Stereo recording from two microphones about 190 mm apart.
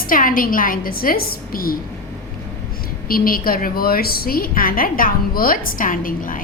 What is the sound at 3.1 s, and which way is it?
A woman's voice, 50° left (ahead or behind).